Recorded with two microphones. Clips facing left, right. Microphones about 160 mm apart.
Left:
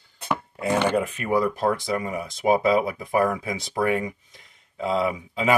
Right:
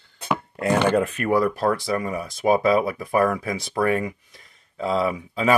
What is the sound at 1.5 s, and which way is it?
Speech, 20° left (ahead or behind).